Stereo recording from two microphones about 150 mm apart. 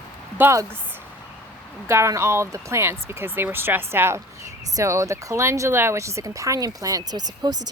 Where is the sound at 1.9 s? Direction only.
20° right (ahead or behind).